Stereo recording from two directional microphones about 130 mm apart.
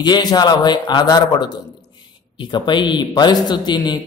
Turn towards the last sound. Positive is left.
turn(degrees=35)  # may be behind; listen again after turning